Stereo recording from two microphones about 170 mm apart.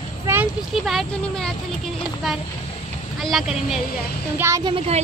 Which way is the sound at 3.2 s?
Centre (ahead or behind).